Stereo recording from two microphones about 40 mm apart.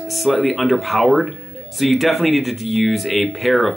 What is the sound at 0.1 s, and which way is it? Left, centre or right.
Speech, centre.